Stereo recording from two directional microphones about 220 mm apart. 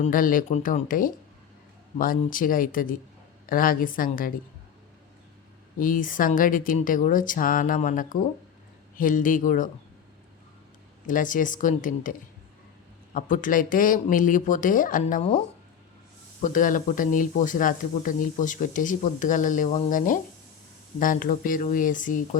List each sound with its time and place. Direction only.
0.0 s speech: 40° left (ahead or behind)
5.8 s speech: 40° left (ahead or behind)
11.0 s speech: 35° left (ahead or behind)
13.1 s speech: 35° left (ahead or behind)
16.4 s speech: 35° left (ahead or behind)